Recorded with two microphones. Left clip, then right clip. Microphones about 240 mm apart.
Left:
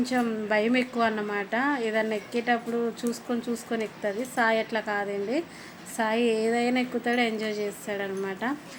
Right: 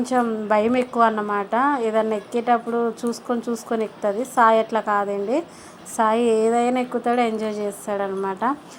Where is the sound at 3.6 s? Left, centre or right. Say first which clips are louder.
Right 8 dB; centre.